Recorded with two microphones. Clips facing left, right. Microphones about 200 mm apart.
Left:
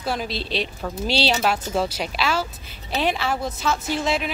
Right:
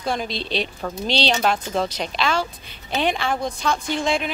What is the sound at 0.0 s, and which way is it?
A woman's voice, 5° left (ahead or behind).